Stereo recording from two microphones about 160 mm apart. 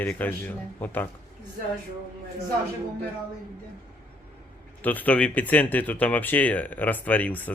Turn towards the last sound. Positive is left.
turn(degrees=10)  # may be behind; listen again after turning